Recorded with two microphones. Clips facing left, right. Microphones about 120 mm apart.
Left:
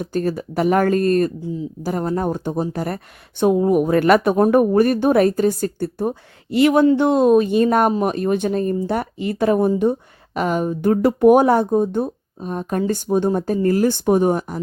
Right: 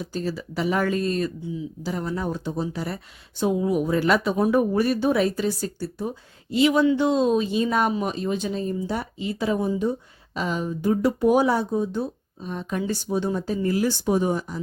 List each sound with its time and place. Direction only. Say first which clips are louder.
0.0 s speech: left 7 dB; 55° left (ahead or behind)